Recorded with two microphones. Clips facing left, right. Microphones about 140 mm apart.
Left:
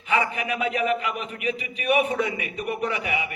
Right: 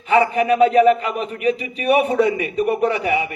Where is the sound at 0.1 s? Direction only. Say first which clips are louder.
Right 9 dB; 35° right (ahead or behind).